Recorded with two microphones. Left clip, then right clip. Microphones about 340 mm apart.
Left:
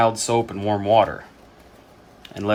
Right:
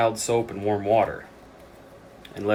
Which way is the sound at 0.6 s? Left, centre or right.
Left.